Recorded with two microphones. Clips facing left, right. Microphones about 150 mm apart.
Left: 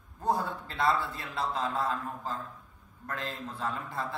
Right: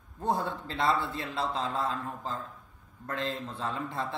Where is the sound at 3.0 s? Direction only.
25° right (ahead or behind).